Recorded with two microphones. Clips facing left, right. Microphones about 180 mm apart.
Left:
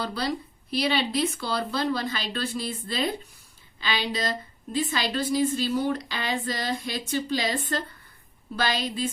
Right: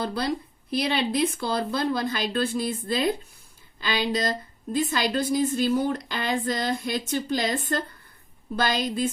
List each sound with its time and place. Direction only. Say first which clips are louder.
0.1 s speech: right 2 dB; 50° right (ahead or behind)